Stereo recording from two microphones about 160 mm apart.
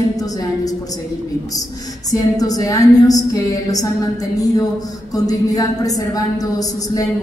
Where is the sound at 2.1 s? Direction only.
20° left (ahead or behind).